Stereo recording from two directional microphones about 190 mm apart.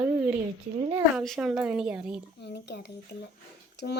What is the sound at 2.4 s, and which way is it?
Speech, 60° left (ahead or behind).